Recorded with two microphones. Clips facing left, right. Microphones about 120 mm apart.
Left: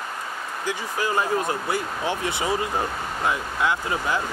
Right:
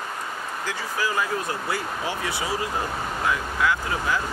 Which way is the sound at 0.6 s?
25° left (ahead or behind).